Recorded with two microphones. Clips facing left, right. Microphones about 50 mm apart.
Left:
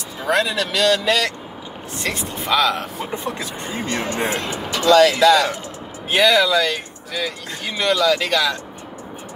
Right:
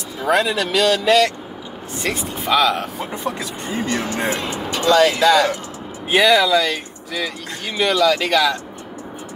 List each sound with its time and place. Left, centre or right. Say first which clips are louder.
0.2 s speech: right 2 dB; centre
3.3 s speech: right 2 dB; left
4.7 s speech: left 2 dB; right
6.0 s speech: right 1 dB; centre